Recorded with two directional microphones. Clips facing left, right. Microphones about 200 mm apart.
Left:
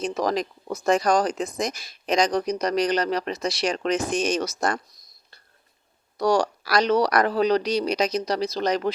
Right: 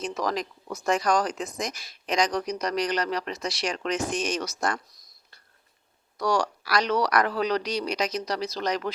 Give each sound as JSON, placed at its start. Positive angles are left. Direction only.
{"t": 0.0, "sound": "speech", "side_deg": 30}
{"t": 6.1, "sound": "speech", "side_deg": 30}